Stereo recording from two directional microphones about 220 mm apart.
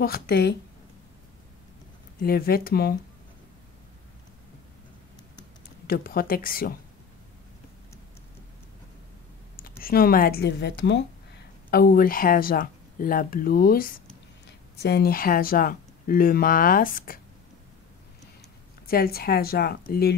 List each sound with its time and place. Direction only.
0.0 s speech: 45° left (ahead or behind)
2.1 s speech: 45° left (ahead or behind)
5.9 s speech: 40° left (ahead or behind)
9.6 s speech: 40° left (ahead or behind)
11.7 s speech: 40° left (ahead or behind)
18.9 s speech: 45° left (ahead or behind)